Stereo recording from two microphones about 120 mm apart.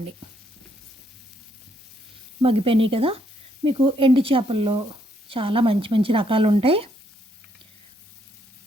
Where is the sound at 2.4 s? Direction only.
50° right (ahead or behind).